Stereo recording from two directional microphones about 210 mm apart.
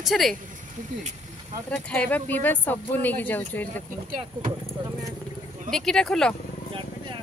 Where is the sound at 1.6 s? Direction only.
5° left (ahead or behind).